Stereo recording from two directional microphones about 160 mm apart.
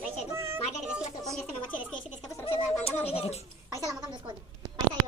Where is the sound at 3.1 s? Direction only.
40° left (ahead or behind).